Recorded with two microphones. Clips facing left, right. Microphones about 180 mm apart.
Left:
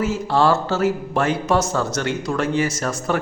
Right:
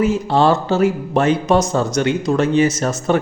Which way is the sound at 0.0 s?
20° right (ahead or behind).